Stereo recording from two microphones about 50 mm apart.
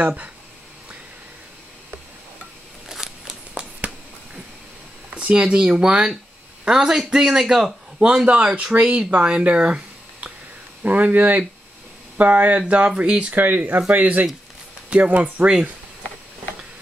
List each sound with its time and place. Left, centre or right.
0.0 s speech: right
2.9 s a sound: centre
5.3 s a man's voice: centre
10.8 s speech: right
13.3 s speech: right